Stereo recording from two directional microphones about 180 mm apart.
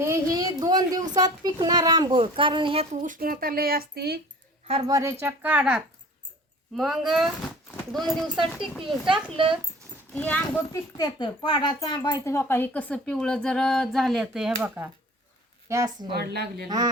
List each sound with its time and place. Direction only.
0.0 s a sound: 20° right (ahead or behind)
1.1 s speech: 20° right (ahead or behind)
2.9 s speech: 45° right (ahead or behind); by 4.2 s 60° right (ahead or behind)
4.9 s speech: 15° right (ahead or behind)
9.3 s speech: 30° right (ahead or behind)
10.2 s a child's voice: 10° left (ahead or behind)
15.7 s speech: 20° right (ahead or behind)
16.1 s speech: 65° right (ahead or behind)
16.6 s speech: 20° right (ahead or behind)